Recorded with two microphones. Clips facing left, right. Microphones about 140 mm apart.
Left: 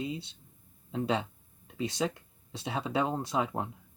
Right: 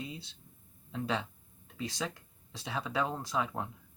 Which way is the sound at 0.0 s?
25° left (ahead or behind).